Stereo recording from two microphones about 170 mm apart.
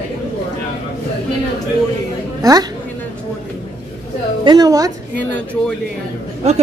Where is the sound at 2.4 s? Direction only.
20° right (ahead or behind).